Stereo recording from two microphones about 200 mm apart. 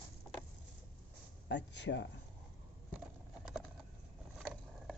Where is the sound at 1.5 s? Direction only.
60° left (ahead or behind).